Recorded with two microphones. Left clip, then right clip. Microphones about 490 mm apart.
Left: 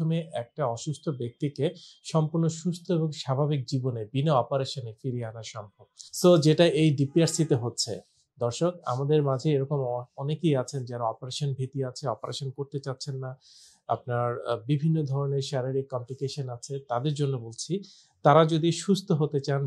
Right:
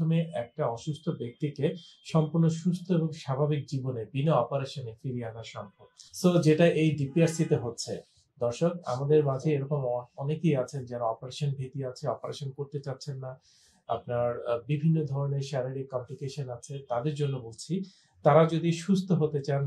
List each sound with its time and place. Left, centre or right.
0.1 s speech: left
6.2 s speech: left